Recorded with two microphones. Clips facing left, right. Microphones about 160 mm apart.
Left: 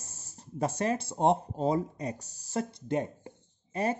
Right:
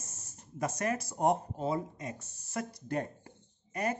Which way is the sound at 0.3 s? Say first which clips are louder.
Left 4 dB; 30° left (ahead or behind).